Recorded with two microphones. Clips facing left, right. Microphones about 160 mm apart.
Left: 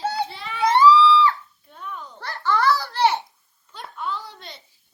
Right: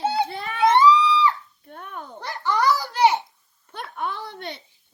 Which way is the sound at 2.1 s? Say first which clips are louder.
Left 1 dB; 15° right (ahead or behind).